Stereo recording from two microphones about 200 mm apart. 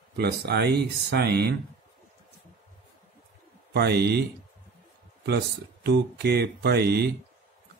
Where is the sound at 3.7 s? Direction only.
55° right (ahead or behind).